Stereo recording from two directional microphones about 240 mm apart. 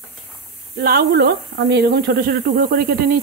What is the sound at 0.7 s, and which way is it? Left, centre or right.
Speech, right.